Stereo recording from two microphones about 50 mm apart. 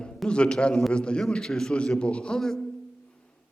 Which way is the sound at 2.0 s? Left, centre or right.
Left.